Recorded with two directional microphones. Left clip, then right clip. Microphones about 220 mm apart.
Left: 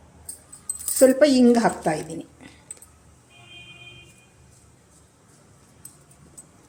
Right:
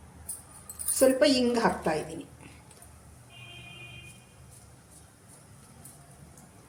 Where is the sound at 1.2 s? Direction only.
40° left (ahead or behind).